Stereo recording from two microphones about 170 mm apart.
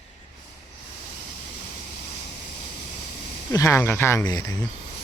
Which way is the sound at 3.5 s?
15° left (ahead or behind).